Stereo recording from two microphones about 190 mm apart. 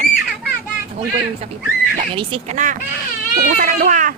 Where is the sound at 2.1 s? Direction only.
30° right (ahead or behind).